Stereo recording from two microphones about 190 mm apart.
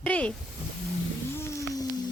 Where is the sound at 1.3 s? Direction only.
15° left (ahead or behind).